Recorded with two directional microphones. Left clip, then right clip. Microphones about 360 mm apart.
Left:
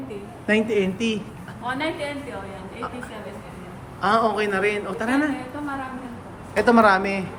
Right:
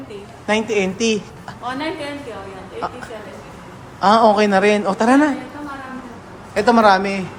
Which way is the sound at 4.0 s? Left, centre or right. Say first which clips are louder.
Right 8 dB; centre.